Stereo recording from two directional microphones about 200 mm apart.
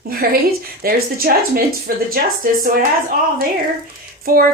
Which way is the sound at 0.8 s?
50° right (ahead or behind).